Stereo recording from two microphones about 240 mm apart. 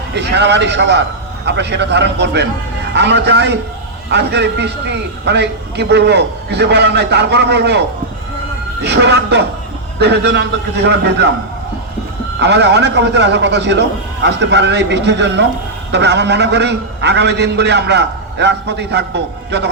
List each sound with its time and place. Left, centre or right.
0.1 s a man's voice: right
12.4 s a man's voice: right